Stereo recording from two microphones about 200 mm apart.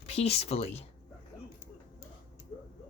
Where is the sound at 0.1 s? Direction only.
30° left (ahead or behind).